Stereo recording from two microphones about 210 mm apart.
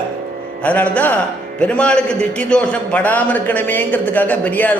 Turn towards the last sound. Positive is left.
turn(degrees=5)  # may be behind; listen again after turning